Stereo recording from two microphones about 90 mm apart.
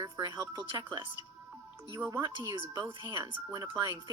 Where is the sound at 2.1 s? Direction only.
55° right (ahead or behind).